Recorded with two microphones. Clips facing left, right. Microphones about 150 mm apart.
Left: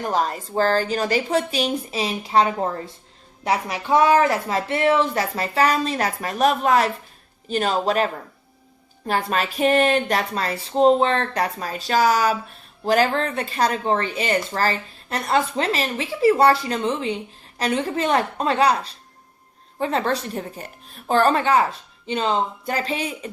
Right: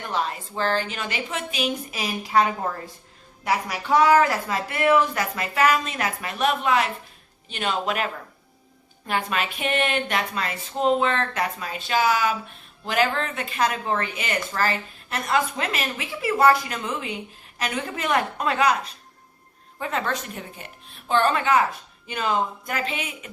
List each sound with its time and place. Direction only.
0.0 s speech: 40° left (ahead or behind)